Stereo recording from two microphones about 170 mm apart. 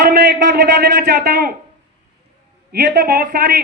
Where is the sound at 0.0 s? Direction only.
60° right (ahead or behind).